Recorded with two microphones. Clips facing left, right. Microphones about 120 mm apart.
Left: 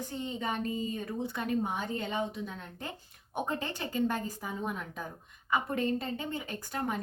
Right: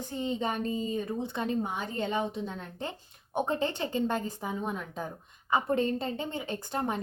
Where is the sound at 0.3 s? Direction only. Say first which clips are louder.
Even; 25° right (ahead or behind).